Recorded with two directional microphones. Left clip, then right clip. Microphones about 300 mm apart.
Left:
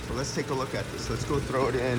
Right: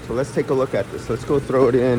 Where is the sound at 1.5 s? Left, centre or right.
Right.